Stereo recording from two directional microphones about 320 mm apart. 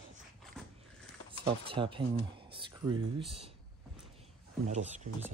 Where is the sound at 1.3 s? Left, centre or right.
Centre.